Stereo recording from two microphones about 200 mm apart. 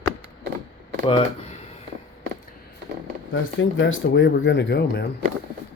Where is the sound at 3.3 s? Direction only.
70° left (ahead or behind).